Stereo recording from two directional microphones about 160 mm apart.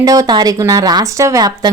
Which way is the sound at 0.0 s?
20° right (ahead or behind).